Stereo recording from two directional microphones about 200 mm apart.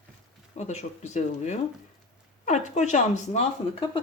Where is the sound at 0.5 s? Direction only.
35° left (ahead or behind).